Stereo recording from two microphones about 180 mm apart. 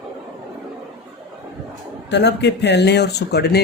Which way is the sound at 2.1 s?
70° left (ahead or behind).